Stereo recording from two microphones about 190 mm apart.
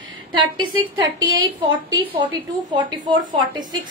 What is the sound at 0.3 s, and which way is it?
Speech, 25° right (ahead or behind).